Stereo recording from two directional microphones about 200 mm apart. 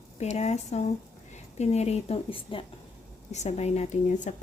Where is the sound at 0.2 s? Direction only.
35° left (ahead or behind).